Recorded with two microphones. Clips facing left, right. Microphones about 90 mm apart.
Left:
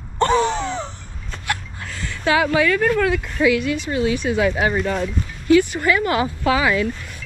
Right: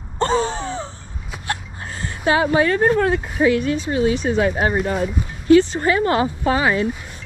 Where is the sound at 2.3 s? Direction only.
35° right (ahead or behind).